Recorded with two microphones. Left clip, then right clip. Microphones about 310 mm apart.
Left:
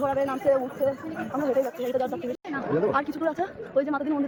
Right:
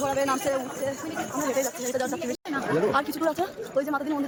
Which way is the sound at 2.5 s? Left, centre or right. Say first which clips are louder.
Right 1 dB; centre.